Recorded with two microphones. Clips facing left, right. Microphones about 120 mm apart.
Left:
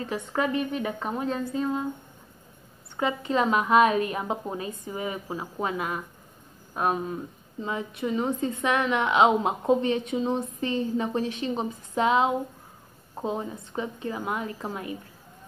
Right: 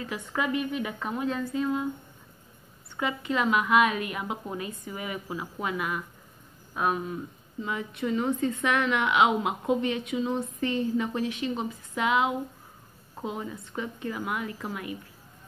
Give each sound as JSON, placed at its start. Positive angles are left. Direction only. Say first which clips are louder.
{"t": 0.0, "sound": "a woman's voice", "louder": "left 3 dB", "side_deg": 35}
{"t": 3.0, "sound": "a woman's voice", "louder": "left 3 dB", "side_deg": 30}